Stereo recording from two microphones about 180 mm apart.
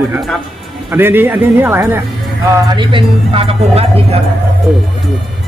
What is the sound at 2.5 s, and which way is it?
A woman's voice, 25° right (ahead or behind).